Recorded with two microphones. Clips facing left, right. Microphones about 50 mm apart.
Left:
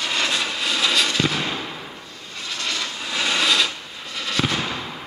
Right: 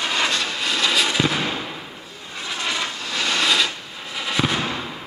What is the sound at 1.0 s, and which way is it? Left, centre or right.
Fireworks, centre.